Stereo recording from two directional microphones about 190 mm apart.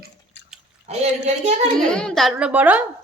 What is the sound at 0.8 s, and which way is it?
Speech, 35° right (ahead or behind).